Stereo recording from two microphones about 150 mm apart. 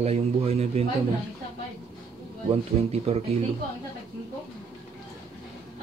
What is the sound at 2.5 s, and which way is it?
Speech, 40° right (ahead or behind).